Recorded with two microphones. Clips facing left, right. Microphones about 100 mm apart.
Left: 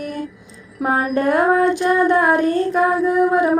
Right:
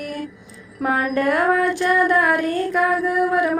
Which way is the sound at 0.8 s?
30° left (ahead or behind).